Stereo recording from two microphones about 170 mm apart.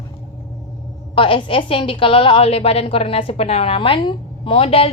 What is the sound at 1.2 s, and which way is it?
A woman's voice, 30° left (ahead or behind).